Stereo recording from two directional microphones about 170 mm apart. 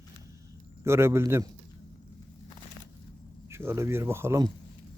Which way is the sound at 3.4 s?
15° right (ahead or behind).